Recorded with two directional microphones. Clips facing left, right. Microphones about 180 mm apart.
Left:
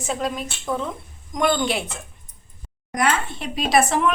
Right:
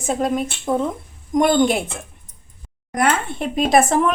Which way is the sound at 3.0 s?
55° right (ahead or behind).